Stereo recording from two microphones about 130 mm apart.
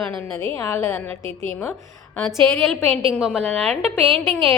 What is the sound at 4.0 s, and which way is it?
Speech, 45° right (ahead or behind).